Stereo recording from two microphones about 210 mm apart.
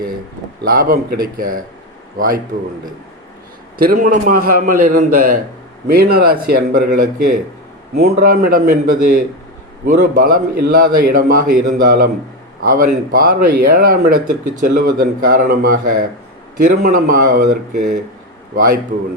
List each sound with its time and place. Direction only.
0.6 s speech: 45° right (ahead or behind)
3.8 s speech: 40° right (ahead or behind)